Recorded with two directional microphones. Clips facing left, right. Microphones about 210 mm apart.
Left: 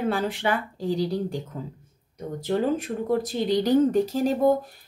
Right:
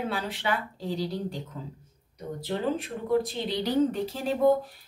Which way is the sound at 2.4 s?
45° left (ahead or behind).